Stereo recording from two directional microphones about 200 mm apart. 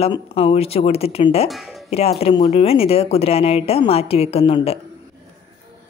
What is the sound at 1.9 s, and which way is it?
A woman's voice, 30° left (ahead or behind).